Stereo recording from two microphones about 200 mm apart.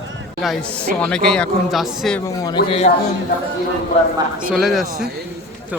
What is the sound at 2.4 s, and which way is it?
Speech, 25° left (ahead or behind).